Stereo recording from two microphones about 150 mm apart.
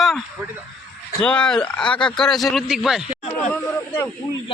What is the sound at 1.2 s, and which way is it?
Speech, 5° left (ahead or behind).